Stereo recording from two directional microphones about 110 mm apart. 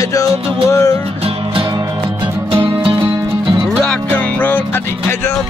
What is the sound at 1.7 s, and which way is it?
Music, 40° right (ahead or behind).